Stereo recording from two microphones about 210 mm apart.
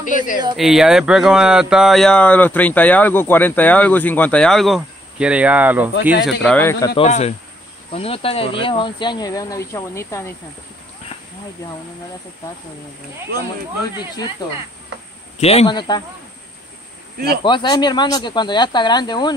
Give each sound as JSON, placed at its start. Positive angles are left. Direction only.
{"t": 0.0, "sound": "speech", "side_deg": 40}
{"t": 0.6, "sound": "speech", "side_deg": 0}
{"t": 6.2, "sound": "speech", "side_deg": 5}
{"t": 7.0, "sound": "speech", "side_deg": 30}
{"t": 14.4, "sound": "speech", "side_deg": 20}
{"t": 17.4, "sound": "speech", "side_deg": 20}